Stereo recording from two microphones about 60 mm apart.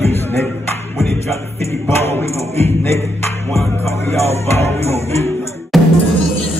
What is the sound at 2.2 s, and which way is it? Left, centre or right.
Music, left.